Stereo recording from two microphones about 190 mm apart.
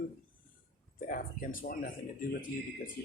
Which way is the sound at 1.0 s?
45° left (ahead or behind).